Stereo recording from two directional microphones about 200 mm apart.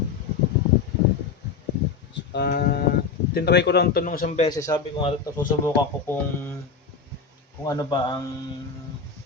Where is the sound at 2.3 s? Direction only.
50° left (ahead or behind).